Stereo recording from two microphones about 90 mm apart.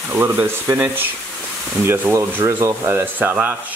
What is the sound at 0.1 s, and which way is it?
Speech, 25° right (ahead or behind).